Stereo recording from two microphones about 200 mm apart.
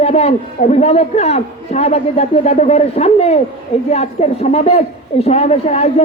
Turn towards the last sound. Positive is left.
turn(degrees=30)  # may be behind; listen again after turning